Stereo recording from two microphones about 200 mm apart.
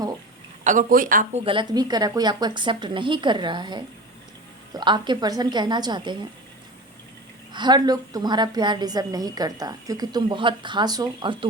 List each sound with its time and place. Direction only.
0.6 s a woman's voice: 40° right (ahead or behind); by 6.1 s 20° right (ahead or behind)
7.5 s a woman's voice: 20° right (ahead or behind)